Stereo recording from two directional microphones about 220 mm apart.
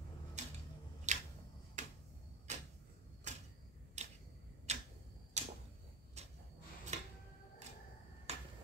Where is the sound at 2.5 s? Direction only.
30° right (ahead or behind).